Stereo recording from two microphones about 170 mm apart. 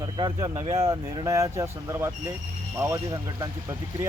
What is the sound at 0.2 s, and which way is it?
Speech, 25° right (ahead or behind).